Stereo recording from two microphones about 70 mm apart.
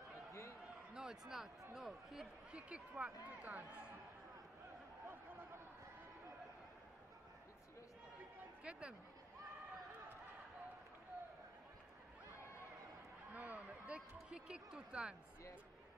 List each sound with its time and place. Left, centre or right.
0.3 s a sound: left
0.9 s speech: centre
2.5 s speech: centre
8.6 s speech: centre
13.3 s speech: right